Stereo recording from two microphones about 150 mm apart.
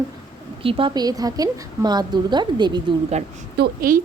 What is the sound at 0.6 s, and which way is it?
A woman's voice, 35° right (ahead or behind).